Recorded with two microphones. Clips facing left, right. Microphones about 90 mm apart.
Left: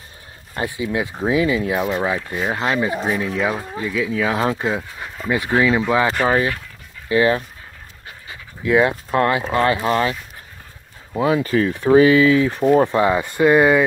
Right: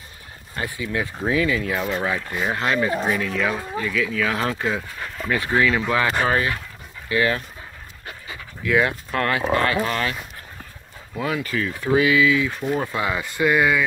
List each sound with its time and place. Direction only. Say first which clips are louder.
0.6 s speech: left 4 dB; 20° left (ahead or behind)
8.6 s speech: left 4 dB; 25° left (ahead or behind)
11.1 s speech: left 7 dB; 30° left (ahead or behind)